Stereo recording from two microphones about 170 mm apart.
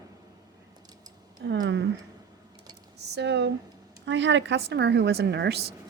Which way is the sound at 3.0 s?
90° right.